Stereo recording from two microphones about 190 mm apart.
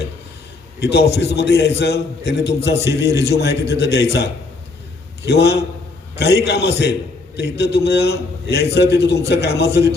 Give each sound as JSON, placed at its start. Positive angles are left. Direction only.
{"t": 0.8, "sound": "a man's voice", "side_deg": 60}